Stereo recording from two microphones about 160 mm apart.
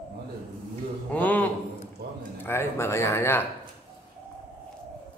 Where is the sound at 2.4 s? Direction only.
15° left (ahead or behind).